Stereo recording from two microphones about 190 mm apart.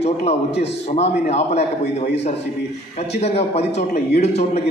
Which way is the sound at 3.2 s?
35° left (ahead or behind).